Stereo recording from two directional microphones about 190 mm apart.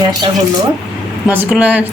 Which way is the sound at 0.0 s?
20° right (ahead or behind).